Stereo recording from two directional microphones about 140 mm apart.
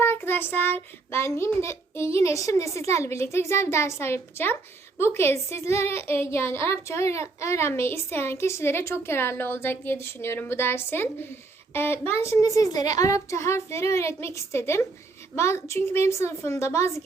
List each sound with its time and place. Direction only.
0.0 s child singing: 15° left (ahead or behind)
2.7 s a child's voice: 20° left (ahead or behind)